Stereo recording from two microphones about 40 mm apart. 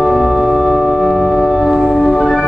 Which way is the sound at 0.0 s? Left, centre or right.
Centre.